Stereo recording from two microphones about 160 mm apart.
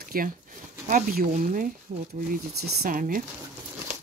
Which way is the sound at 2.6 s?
80° right.